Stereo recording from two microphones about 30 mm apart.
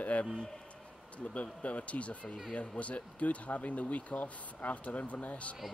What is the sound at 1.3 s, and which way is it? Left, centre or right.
Speech, left.